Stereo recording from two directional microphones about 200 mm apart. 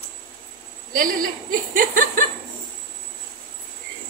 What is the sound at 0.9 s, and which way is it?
A woman's voice, 45° right (ahead or behind).